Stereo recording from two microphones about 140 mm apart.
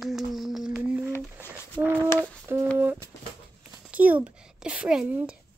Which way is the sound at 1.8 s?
20° right (ahead or behind).